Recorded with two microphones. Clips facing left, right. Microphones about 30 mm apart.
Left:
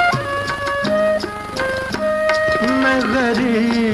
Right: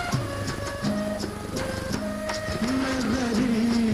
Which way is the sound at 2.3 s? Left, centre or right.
Left.